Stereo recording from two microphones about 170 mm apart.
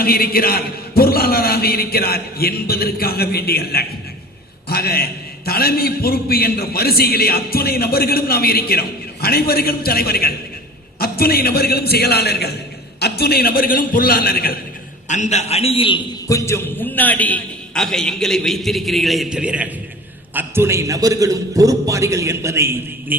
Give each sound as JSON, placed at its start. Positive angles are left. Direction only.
{"t": 0.0, "sound": "a man's voice", "side_deg": 60}
{"t": 15.0, "sound": "a man's voice", "side_deg": 45}
{"t": 16.3, "sound": "a man's voice", "side_deg": 15}